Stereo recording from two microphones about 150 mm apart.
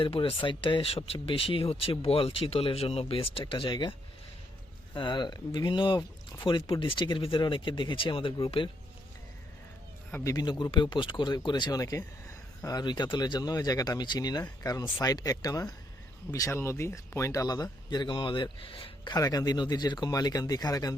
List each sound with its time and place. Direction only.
0.0 s speech: 35° left (ahead or behind)
4.9 s speech: 30° left (ahead or behind)
10.1 s speech: 10° left (ahead or behind)
10.3 s speech: 30° left (ahead or behind)
19.1 s speech: 25° left (ahead or behind)